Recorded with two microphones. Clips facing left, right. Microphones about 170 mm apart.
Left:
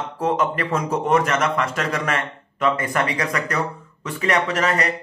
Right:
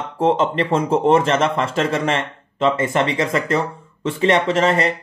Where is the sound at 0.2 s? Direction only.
25° right (ahead or behind).